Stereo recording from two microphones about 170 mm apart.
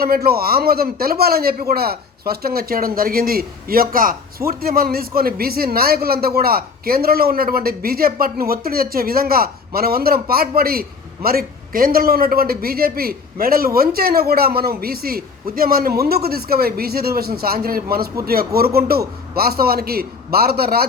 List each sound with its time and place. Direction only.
0.0 s a man's voice: 65° right (ahead or behind)